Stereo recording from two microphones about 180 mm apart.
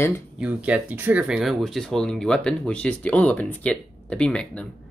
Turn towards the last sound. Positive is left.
turn(degrees=5)  # may be behind; listen again after turning